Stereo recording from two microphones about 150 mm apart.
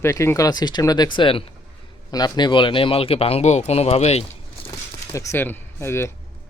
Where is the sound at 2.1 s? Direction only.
25° left (ahead or behind); by 4.2 s 45° left (ahead or behind).